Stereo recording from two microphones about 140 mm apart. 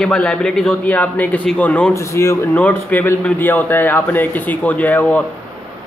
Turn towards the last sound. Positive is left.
turn(degrees=10)  # may be behind; listen again after turning